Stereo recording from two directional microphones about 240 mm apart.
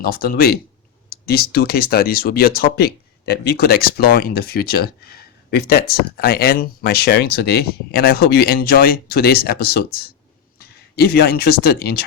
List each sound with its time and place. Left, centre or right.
0.0 s speech: left